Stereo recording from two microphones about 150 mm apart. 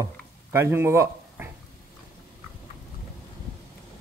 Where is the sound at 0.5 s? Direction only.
15° right (ahead or behind).